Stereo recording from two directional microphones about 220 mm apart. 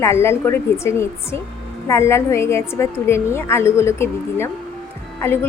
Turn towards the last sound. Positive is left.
turn(degrees=10)  # may be behind; listen again after turning